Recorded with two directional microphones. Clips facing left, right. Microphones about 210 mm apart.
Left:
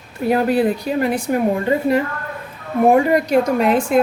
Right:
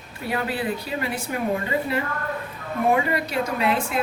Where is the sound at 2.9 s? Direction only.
45° left (ahead or behind).